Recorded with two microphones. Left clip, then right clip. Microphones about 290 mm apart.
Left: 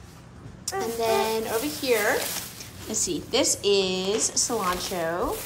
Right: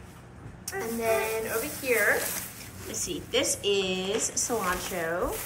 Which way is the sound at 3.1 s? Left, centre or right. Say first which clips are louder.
Left 3 dB; centre.